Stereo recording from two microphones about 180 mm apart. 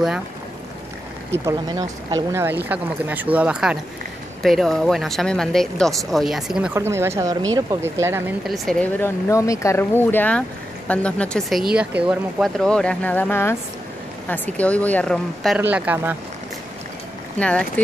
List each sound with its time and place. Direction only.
1.3 s speech: 15° right (ahead or behind)
2.7 s speech: 10° right (ahead or behind)
8.5 s speech: 5° left (ahead or behind)
15.6 s speech: 10° right (ahead or behind)
17.4 s speech: 5° left (ahead or behind)